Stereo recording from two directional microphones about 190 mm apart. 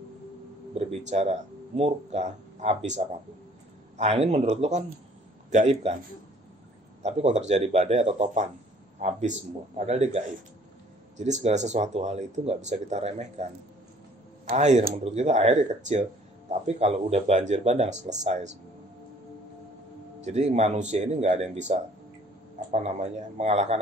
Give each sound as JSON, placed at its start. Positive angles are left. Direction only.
{"t": 0.7, "sound": "speech", "side_deg": -35}
{"t": 7.0, "sound": "speech", "side_deg": -35}
{"t": 20.2, "sound": "speech", "side_deg": -35}